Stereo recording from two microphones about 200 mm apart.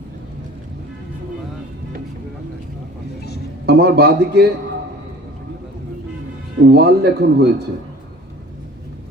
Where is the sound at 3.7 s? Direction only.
55° right (ahead or behind).